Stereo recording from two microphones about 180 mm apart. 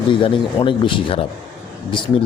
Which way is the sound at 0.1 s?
30° left (ahead or behind).